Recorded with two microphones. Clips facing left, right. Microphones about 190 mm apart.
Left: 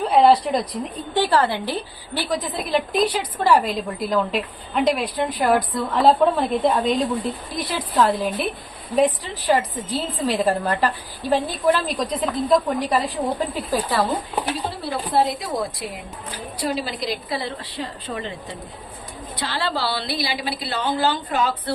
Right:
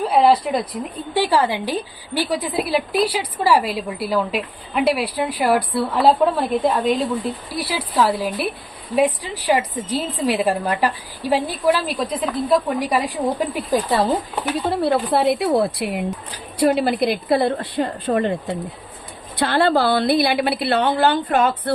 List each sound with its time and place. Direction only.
0.1 s a woman's voice: 5° right (ahead or behind)
14.7 s a woman's voice: 60° right (ahead or behind)